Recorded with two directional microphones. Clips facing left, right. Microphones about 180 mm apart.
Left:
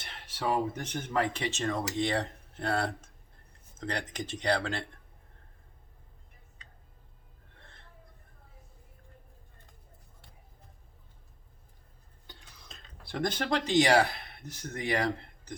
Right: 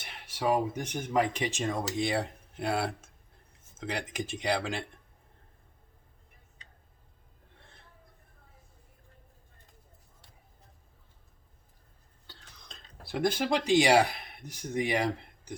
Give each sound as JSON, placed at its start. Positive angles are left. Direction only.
{"t": 0.0, "sound": "speech", "side_deg": -10}
{"t": 12.3, "sound": "a sound", "side_deg": 15}
{"t": 12.6, "sound": "speech", "side_deg": 0}